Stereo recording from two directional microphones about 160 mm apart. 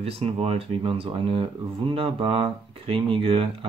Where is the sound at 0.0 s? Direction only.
40° right (ahead or behind).